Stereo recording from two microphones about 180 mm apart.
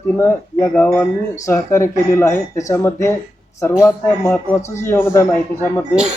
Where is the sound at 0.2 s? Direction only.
10° left (ahead or behind).